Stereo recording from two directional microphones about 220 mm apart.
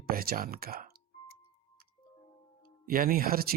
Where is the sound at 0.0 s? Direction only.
40° right (ahead or behind).